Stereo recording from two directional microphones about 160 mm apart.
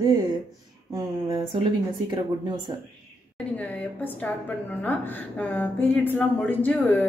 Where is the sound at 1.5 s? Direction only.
30° right (ahead or behind).